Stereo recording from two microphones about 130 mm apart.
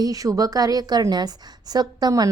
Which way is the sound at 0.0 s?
25° right (ahead or behind).